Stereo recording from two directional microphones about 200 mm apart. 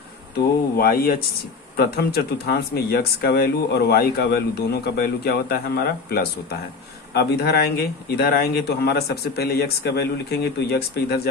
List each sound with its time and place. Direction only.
0.8 s speech: 50° left (ahead or behind)